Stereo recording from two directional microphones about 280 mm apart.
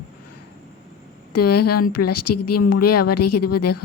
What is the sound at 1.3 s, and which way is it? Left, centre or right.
A woman's voice, left.